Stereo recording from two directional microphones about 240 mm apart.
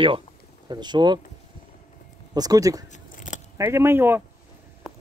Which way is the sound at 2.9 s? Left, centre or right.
Left.